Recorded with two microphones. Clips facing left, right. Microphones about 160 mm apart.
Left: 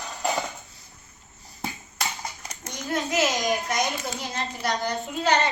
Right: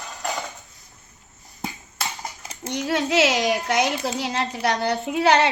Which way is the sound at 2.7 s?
75° right (ahead or behind).